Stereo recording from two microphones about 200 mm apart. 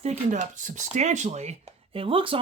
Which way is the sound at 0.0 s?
35° right (ahead or behind).